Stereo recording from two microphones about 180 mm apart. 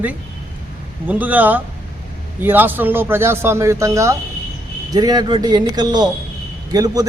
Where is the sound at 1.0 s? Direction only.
10° right (ahead or behind).